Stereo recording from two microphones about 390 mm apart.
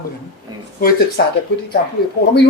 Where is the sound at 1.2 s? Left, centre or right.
Left.